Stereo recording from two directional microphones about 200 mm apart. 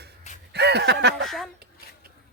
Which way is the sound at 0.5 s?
55° right (ahead or behind).